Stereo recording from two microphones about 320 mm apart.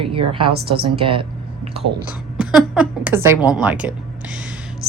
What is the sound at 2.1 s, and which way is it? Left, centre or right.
A woman's voice, centre.